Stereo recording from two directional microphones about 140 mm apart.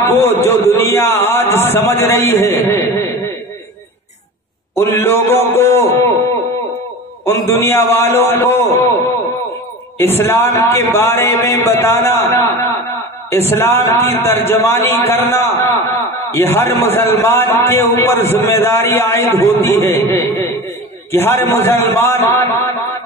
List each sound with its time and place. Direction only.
0.0 s a man's voice: 15° left (ahead or behind)
4.7 s a man's voice: 20° left (ahead or behind)
7.2 s a man's voice: 15° left (ahead or behind)
9.9 s a man's voice: 15° left (ahead or behind)